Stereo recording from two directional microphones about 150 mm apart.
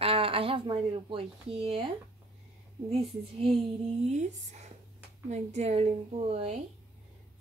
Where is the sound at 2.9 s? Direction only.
40° right (ahead or behind).